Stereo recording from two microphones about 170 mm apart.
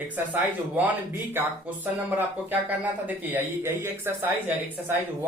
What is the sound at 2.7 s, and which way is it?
Speech, 10° right (ahead or behind).